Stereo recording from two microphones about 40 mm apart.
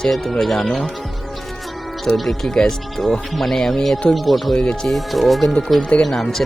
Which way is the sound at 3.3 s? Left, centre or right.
Centre.